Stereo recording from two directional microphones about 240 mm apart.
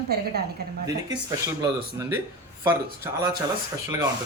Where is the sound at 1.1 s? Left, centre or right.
Centre.